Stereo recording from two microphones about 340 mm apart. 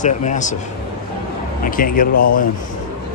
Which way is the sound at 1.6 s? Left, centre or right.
Left.